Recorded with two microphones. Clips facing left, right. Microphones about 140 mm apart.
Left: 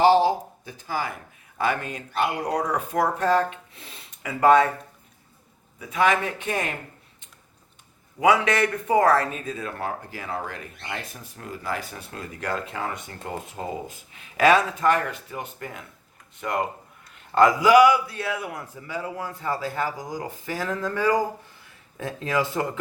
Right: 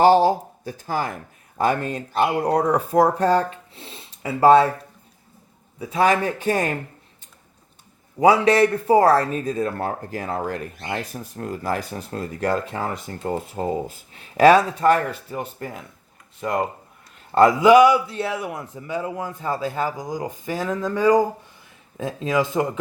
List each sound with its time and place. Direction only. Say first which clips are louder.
0.0 s speech: right 3 dB; 45° right (ahead or behind); by 4.7 s 30° right (ahead or behind)
5.8 s speech: right 3 dB; 35° right (ahead or behind)
8.2 s a man's voice: right 5 dB; 35° right (ahead or behind); by 22.8 s 15° right (ahead or behind)